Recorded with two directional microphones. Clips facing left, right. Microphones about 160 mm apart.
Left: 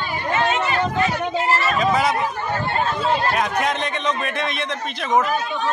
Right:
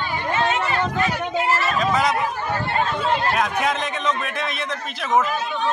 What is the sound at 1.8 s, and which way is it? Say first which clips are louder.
Speech: left 2 dB; centre (ahead or behind).